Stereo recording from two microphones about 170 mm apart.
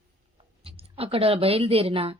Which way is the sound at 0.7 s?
35° right (ahead or behind).